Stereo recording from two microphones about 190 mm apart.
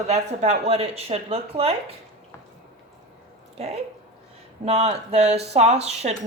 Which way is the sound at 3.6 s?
35° right (ahead or behind).